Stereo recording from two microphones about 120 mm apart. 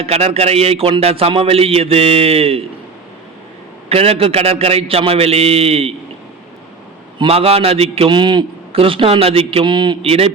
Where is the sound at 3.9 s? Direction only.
55° right (ahead or behind).